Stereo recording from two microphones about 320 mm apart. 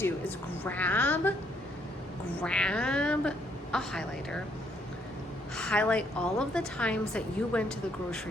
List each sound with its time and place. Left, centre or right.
0.0 s a woman's voice: centre
2.4 s a woman's voice: centre
5.5 s a woman's voice: centre